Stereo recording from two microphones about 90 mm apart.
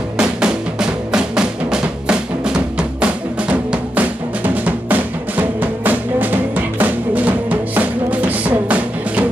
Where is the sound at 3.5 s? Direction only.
15° right (ahead or behind).